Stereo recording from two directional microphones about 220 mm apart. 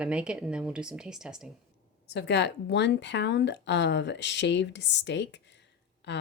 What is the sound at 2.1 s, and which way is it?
Speech, 50° left (ahead or behind).